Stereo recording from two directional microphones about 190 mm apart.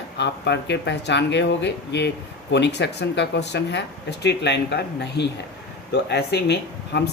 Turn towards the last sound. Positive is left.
turn(degrees=60)  # may be behind; listen again after turning